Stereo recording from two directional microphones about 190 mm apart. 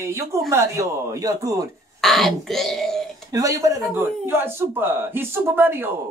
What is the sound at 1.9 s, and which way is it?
Speech, centre (ahead or behind).